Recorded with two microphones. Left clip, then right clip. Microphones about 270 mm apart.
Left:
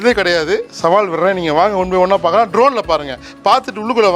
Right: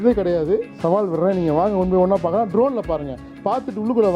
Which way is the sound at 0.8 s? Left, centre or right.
Left.